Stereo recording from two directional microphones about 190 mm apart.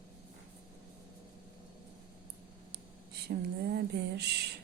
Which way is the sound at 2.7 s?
60° right (ahead or behind).